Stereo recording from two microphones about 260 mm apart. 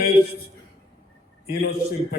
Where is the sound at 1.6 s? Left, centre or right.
Left.